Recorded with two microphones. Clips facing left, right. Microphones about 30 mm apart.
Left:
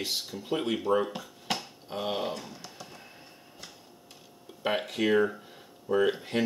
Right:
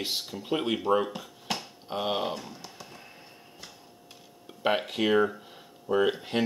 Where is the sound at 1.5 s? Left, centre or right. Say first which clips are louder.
Left 1 dB; centre.